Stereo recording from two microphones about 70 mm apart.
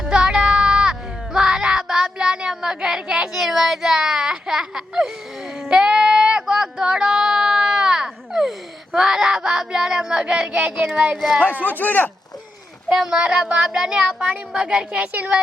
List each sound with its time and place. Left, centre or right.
0.0 s music: centre
5.6 s a sound: centre
9.0 s a child's voice: centre
11.6 s speech: left
12.9 s speech: centre